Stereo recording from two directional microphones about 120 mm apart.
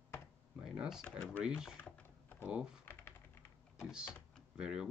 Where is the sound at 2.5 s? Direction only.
5° right (ahead or behind).